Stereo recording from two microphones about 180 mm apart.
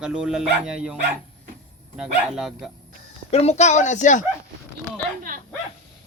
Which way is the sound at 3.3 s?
35° left (ahead or behind).